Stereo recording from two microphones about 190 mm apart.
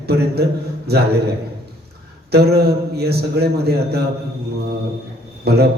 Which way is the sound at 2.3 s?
55° right (ahead or behind).